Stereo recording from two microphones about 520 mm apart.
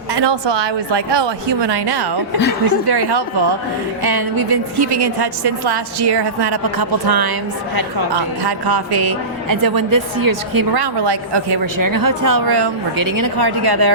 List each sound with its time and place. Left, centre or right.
0.1 s a woman's voice: right